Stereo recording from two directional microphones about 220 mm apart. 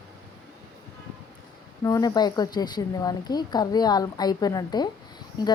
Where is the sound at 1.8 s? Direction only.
15° left (ahead or behind).